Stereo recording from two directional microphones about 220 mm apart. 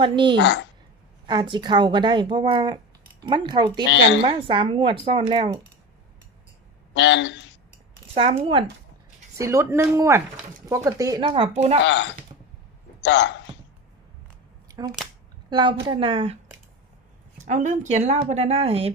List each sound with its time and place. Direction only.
0.0 s a woman's voice: 20° right (ahead or behind)
0.3 s speech: 55° left (ahead or behind)
1.3 s a woman's voice: 20° right (ahead or behind)
6.9 s speech: 55° left (ahead or behind)
8.1 s a woman's voice: 25° right (ahead or behind)
9.4 s a woman's voice: 10° right (ahead or behind); by 11.8 s 30° right (ahead or behind)
13.0 s a man's voice: 55° left (ahead or behind)
14.7 s a sound: 20° right (ahead or behind)
15.4 s a woman's voice: 20° right (ahead or behind)
17.4 s speech: 35° right (ahead or behind)